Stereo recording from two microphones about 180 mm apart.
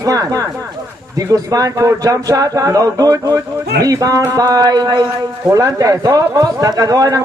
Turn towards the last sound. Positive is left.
turn(degrees=-20)  # may be behind; listen again after turning